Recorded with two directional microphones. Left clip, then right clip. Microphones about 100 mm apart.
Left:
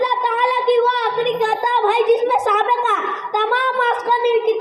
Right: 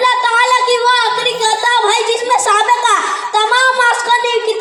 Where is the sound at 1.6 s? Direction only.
25° right (ahead or behind).